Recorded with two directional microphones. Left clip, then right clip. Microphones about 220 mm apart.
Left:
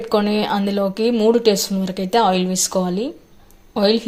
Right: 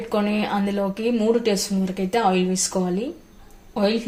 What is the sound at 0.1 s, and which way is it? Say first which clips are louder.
Speech: left 5 dB; 35° left (ahead or behind).